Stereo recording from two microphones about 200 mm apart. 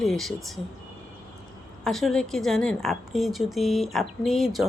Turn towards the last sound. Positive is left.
turn(degrees=0)  # may be behind; listen again after turning